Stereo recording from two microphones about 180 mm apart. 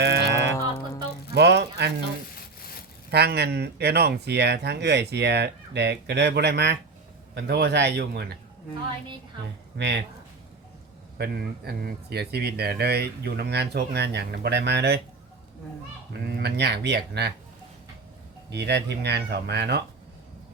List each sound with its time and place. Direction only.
0.0 s music: 70° right (ahead or behind)
1.3 s a sound: 70° right (ahead or behind)
3.1 s speech: 65° right (ahead or behind)
9.7 s speech: 75° right (ahead or behind)
11.2 s speech: 60° right (ahead or behind)
16.1 s speech: 65° right (ahead or behind)
18.5 s speech: 70° right (ahead or behind)